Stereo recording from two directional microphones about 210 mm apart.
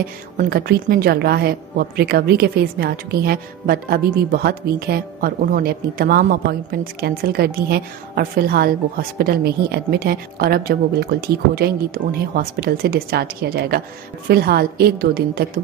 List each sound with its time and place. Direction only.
0.4 s a woman's voice: 45° right (ahead or behind)